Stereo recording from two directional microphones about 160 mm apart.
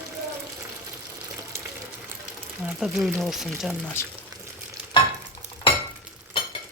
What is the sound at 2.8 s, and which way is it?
Speech, 5° right (ahead or behind).